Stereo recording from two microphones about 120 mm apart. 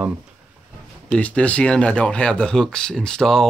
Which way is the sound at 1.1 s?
10° left (ahead or behind).